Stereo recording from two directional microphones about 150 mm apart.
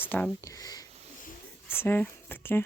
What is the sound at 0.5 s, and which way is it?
Speech, 25° left (ahead or behind).